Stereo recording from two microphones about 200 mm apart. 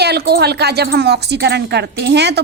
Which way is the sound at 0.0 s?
55° right (ahead or behind).